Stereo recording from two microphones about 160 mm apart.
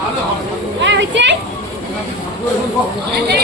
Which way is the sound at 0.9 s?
90° right.